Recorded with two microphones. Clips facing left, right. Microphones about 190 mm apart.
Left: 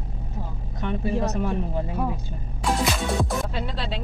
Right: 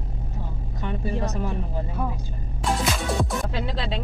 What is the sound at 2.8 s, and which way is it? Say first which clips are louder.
Music: left 1 dB; centre (ahead or behind).